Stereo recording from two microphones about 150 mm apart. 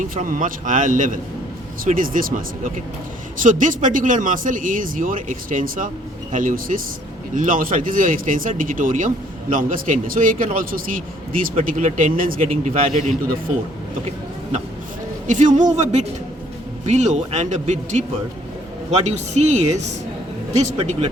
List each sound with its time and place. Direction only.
0.0 s speech: 60° right (ahead or behind)
3.4 s speech: 60° right (ahead or behind)
11.7 s speech: 60° right (ahead or behind)
15.3 s speech: 55° right (ahead or behind)